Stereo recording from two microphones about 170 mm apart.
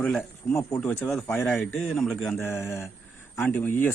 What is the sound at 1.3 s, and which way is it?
Speech, 10° left (ahead or behind).